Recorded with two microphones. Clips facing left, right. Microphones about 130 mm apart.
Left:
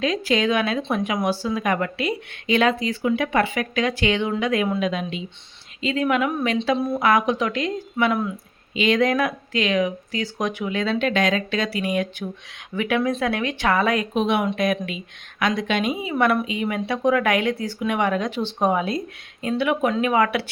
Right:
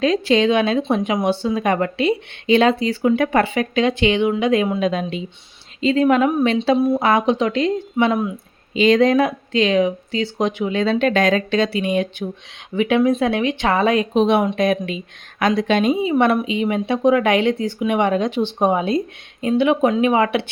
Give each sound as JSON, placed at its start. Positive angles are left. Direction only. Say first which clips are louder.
{"t": 0.0, "sound": "speech", "louder": "right 5 dB", "side_deg": -30}
{"t": 3.4, "sound": "speech", "louder": "right 5 dB", "side_deg": -30}
{"t": 4.9, "sound": "speech", "louder": "right 4 dB", "side_deg": -40}
{"t": 6.7, "sound": "speech", "louder": "right 7 dB", "side_deg": -10}
{"t": 7.0, "sound": "speech", "louder": "right 3 dB", "side_deg": -30}
{"t": 8.7, "sound": "speech", "louder": "right 6 dB", "side_deg": -35}